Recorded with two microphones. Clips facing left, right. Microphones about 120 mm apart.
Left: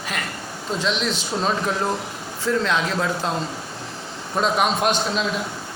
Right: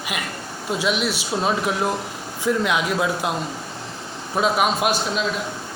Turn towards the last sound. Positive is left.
turn(degrees=-5)  # may be behind; listen again after turning